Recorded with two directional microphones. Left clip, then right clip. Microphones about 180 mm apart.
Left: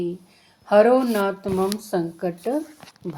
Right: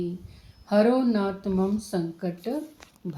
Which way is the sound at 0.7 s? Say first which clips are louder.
Left 6 dB; 45° left (ahead or behind).